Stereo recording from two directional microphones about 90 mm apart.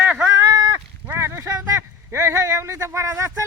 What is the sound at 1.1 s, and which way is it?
Speech, 30° right (ahead or behind).